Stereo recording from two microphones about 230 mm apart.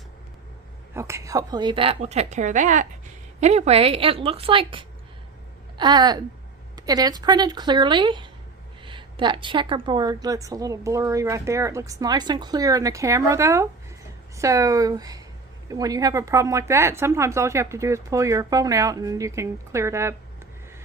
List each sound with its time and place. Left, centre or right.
0.9 s a woman's voice: centre